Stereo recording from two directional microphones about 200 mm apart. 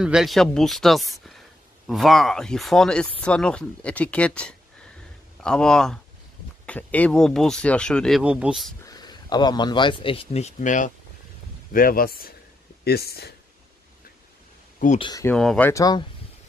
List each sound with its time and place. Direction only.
0.0 s speech: 5° right (ahead or behind)
8.8 s speech: 20° left (ahead or behind); by 13.3 s 50° left (ahead or behind)
15.0 s speech: 20° left (ahead or behind)
15.2 s speech: 5° left (ahead or behind)
15.7 s speech: 20° left (ahead or behind)